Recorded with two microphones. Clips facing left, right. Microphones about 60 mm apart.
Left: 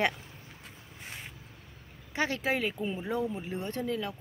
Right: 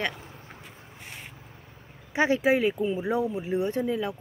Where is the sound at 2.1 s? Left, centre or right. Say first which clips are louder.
Right 8 dB; centre.